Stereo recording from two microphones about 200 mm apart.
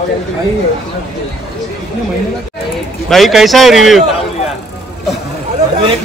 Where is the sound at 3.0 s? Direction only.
Centre (ahead or behind).